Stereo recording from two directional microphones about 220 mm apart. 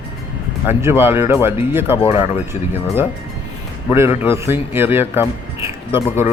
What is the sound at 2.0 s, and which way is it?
Speech, 25° left (ahead or behind).